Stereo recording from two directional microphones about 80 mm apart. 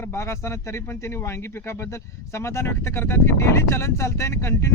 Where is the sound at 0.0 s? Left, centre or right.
Left.